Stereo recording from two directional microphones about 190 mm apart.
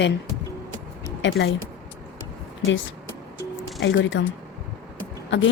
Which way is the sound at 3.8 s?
75° left (ahead or behind).